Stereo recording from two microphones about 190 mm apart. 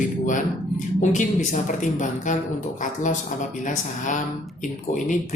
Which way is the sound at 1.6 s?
40° left (ahead or behind).